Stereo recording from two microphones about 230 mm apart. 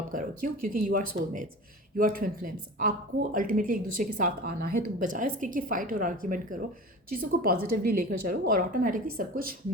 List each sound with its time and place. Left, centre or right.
0.1 s speech: right